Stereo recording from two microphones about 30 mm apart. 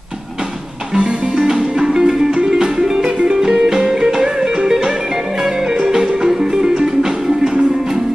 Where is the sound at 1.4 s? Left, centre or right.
Centre.